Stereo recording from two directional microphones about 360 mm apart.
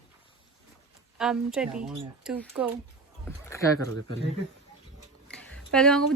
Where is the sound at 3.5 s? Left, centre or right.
Centre.